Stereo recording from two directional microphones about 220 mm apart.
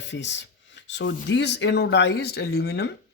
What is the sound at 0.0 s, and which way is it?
Speech, 55° left (ahead or behind).